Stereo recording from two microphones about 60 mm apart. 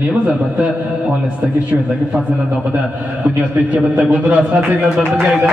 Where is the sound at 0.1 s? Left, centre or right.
Right.